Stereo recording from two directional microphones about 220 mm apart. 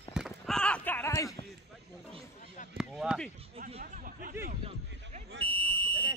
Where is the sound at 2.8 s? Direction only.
5° right (ahead or behind).